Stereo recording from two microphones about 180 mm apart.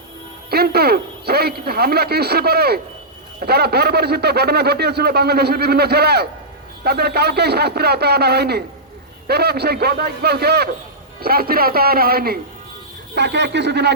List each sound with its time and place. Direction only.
0.5 s speech: 60° right (ahead or behind)
13.1 s speech: 70° right (ahead or behind)